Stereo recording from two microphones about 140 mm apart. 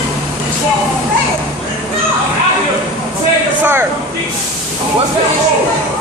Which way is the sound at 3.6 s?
15° right (ahead or behind).